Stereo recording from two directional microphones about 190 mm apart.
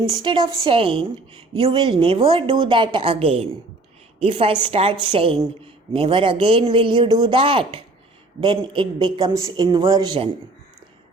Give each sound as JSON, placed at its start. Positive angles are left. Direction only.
{"t": 0.1, "sound": "a woman's voice", "side_deg": -25}